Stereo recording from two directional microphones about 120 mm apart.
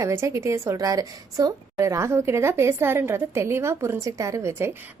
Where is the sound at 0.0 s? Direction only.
25° right (ahead or behind).